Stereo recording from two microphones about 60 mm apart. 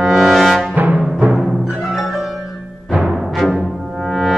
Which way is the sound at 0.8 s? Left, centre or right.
Right.